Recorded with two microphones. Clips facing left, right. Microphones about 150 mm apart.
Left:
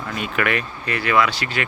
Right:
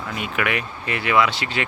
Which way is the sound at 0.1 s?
15° right (ahead or behind).